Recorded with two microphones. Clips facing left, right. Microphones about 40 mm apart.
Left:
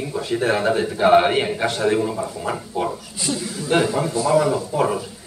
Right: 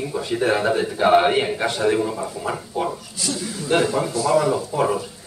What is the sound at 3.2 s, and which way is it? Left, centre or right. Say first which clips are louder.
Speech: left 2 dB; left.